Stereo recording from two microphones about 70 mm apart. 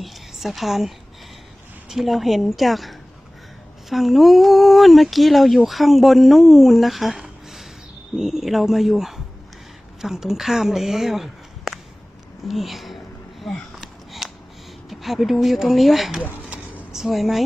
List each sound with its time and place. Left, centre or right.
0.0 s whispering: centre
1.9 s speech: centre
8.2 s speech: centre
12.4 s a sound: centre
14.9 s speech: centre